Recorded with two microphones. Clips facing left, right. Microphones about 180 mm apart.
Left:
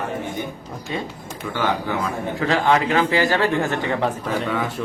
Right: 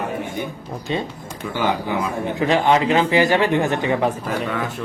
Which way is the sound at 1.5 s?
15° right (ahead or behind).